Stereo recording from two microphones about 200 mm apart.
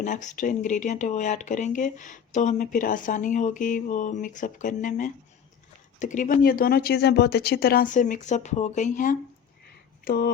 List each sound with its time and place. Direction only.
0.0 s speech: 40° left (ahead or behind)